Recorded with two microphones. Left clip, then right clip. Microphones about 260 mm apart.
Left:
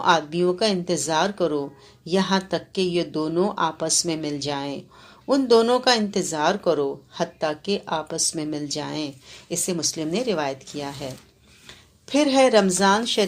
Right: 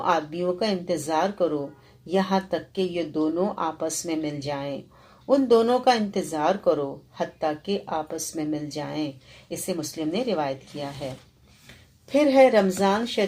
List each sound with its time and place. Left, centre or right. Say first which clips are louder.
0.0 s speech: left 4 dB; left
12.0 s speech: right 1 dB; left